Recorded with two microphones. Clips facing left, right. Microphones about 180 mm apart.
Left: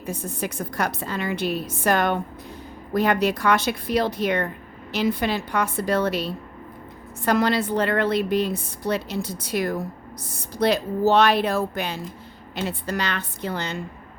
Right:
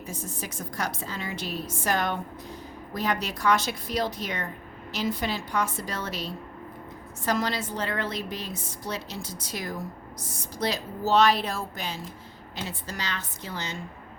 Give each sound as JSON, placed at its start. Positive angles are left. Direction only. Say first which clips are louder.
{"t": 0.0, "sound": "a woman's voice", "louder": "left 7 dB", "side_deg": 60}